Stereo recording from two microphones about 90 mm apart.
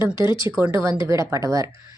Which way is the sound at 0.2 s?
60° left (ahead or behind).